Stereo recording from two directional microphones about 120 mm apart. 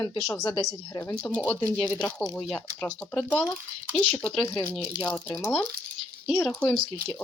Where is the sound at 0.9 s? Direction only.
20° left (ahead or behind).